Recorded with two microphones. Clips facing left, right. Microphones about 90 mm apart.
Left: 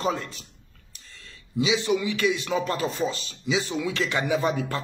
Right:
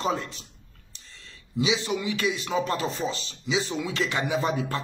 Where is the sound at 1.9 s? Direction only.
35° right (ahead or behind).